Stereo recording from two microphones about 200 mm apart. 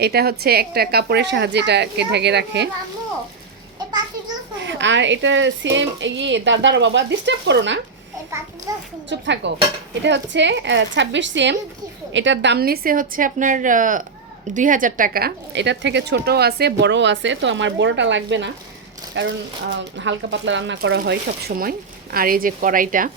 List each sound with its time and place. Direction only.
0.0 s speech: 50° right (ahead or behind)
4.6 s speech: 65° right (ahead or behind)
9.0 s speech: 60° right (ahead or behind); by 23.1 s 45° right (ahead or behind)